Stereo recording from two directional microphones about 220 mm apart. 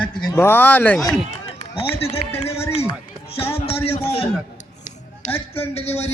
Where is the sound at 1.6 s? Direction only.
25° left (ahead or behind).